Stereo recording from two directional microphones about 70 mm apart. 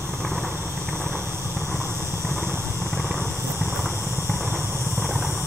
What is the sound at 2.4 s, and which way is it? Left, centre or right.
Vehicle, right.